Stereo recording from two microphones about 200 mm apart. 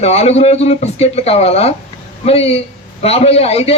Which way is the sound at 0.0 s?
30° left (ahead or behind).